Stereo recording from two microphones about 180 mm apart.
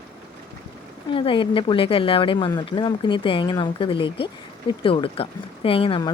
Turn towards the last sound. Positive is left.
turn(degrees=30)  # may be behind; listen again after turning